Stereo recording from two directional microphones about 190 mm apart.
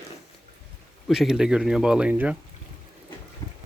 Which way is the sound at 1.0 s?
Centre (ahead or behind).